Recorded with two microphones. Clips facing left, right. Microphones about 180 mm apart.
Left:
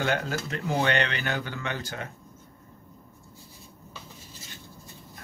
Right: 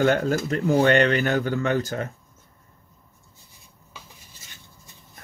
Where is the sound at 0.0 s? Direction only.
45° right (ahead or behind).